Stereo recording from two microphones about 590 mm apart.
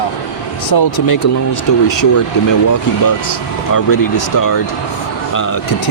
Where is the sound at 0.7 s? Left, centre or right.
Left.